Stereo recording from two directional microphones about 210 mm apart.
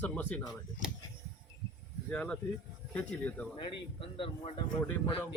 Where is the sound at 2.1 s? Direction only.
5° left (ahead or behind).